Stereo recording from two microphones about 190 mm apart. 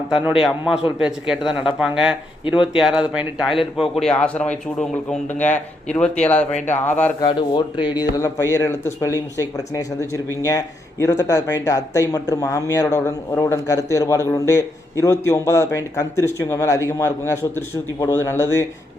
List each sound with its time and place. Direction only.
0.1 s a man's voice: 5° right (ahead or behind)
7.3 s speech: 25° left (ahead or behind)
11.0 s speech: 15° left (ahead or behind)